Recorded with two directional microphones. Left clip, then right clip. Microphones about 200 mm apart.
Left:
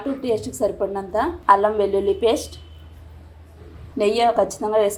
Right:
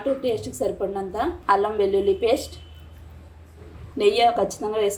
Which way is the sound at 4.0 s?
20° left (ahead or behind).